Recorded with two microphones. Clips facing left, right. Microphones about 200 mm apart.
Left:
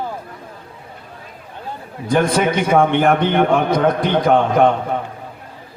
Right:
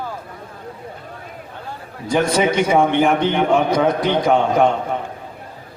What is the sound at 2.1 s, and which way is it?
A man's voice, 55° left (ahead or behind).